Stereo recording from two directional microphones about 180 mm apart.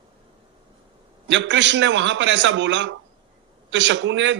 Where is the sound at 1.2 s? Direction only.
90° right.